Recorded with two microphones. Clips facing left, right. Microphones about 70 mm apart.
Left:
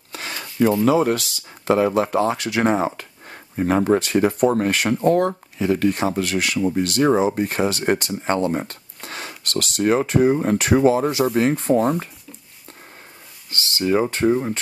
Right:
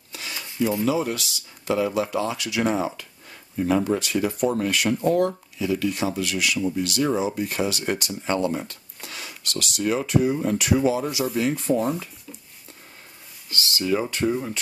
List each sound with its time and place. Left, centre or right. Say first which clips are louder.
0.1 s rub: left 4 dB; left
0.8 s speech: left 6 dB; left
13.5 s speech: left 4 dB; left